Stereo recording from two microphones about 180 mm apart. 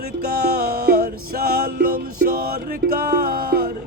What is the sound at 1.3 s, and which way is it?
Music, 55° right (ahead or behind).